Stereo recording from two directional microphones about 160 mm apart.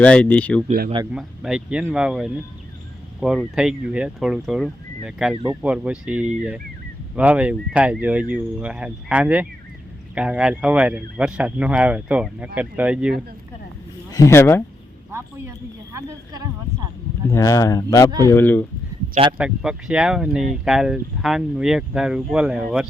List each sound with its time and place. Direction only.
0.0 s speech: 10° left (ahead or behind)
1.1 s speech: 5° right (ahead or behind)
14.1 s speech: 20° left (ahead or behind)
15.1 s speech: 15° right (ahead or behind)
17.2 s speech: 20° left (ahead or behind)
19.4 s speech: 5° right (ahead or behind)